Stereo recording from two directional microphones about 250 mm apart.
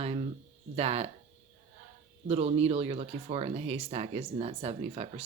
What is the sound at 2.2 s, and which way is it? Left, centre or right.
Speech, right.